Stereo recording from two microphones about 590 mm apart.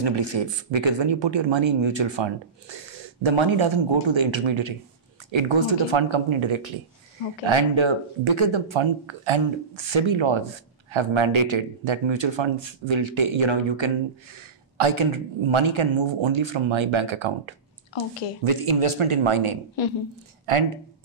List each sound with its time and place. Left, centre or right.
0.0 s speech: right